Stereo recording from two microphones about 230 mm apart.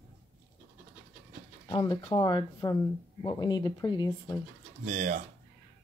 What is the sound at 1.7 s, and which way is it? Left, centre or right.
Speech, left.